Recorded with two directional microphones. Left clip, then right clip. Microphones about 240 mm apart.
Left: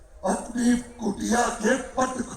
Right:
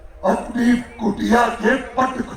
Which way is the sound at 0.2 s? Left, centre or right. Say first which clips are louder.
Right 7 dB; left.